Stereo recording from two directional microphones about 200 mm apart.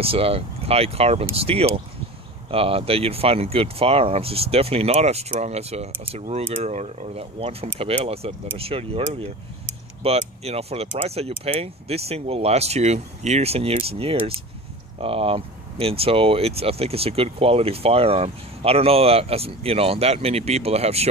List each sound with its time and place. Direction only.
0.0 s speech: 30° right (ahead or behind)